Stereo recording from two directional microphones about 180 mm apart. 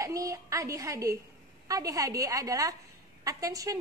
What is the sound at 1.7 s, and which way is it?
A woman's voice, 20° right (ahead or behind).